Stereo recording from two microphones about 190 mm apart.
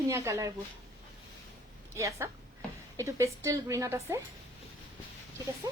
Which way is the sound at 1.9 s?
15° right (ahead or behind).